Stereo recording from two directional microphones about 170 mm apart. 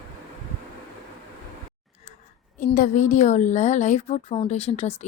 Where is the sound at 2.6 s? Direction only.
50° left (ahead or behind).